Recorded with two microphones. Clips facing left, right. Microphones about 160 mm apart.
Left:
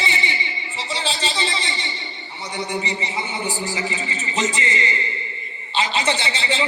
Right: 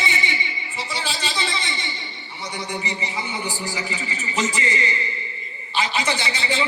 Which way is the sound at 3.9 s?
30° left (ahead or behind).